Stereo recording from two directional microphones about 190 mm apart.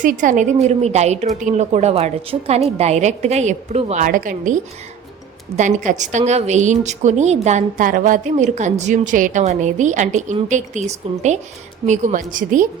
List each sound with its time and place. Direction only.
0.0 s a woman's voice: 45° right (ahead or behind)
4.0 s a woman's voice: 45° right (ahead or behind)
5.5 s a woman's voice: 40° right (ahead or behind)